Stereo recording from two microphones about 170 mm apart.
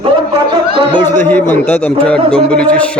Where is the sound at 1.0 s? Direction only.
15° left (ahead or behind).